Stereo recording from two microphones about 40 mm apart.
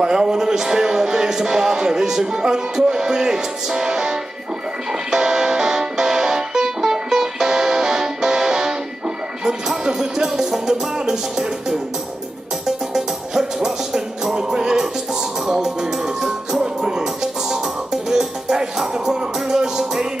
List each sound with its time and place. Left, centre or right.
0.0 s speech: centre
5.1 s music: centre
12.6 s music: centre